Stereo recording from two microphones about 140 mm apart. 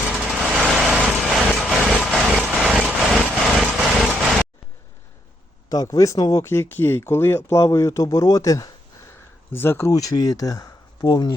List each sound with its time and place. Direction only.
0.3 s vehicle: 5° right (ahead or behind)
2.0 s a sound: centre (ahead or behind)
5.6 s speech: 25° left (ahead or behind)